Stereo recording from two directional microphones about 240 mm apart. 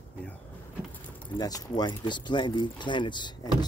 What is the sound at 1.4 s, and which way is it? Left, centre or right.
Speech, centre.